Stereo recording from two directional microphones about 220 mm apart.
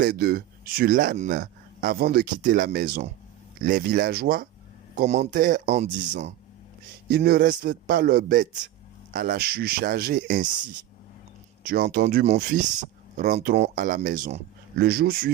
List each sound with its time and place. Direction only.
0.0 s speech: 45° right (ahead or behind)
4.9 s speech: 30° right (ahead or behind)
7.1 s a man's voice: 45° right (ahead or behind)
11.6 s a man's voice: 45° right (ahead or behind)
12.0 s speech: 30° right (ahead or behind)
14.8 s a man's voice: 45° right (ahead or behind)